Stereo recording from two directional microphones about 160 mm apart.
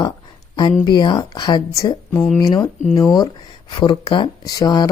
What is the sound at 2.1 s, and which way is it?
Speech, 5° left (ahead or behind).